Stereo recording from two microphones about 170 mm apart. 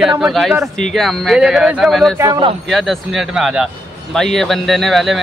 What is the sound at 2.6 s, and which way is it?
A man's voice, centre (ahead or behind).